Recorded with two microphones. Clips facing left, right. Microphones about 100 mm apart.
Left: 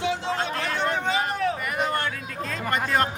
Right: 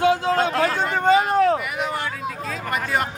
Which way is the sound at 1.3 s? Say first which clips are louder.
Right 8 dB; 45° right (ahead or behind).